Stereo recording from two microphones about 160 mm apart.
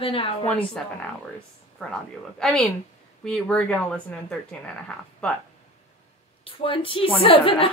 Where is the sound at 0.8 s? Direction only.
5° left (ahead or behind).